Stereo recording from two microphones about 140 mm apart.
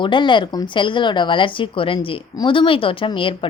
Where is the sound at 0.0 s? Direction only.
35° left (ahead or behind).